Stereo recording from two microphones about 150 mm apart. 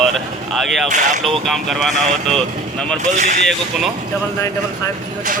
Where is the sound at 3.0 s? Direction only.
55° right (ahead or behind).